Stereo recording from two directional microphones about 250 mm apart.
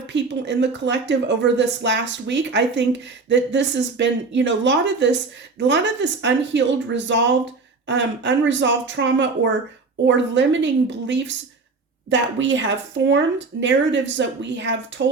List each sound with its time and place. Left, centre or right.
0.1 s speech: right